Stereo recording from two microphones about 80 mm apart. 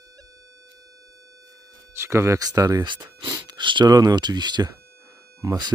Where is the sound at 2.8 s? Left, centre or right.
Right.